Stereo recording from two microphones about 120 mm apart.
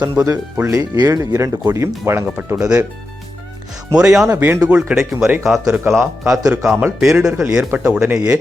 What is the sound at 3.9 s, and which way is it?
Speech, 5° right (ahead or behind).